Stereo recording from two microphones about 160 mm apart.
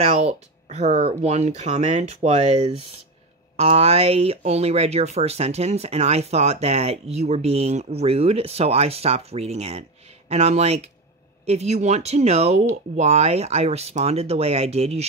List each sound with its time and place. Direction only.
0.0 s speech: 40° right (ahead or behind)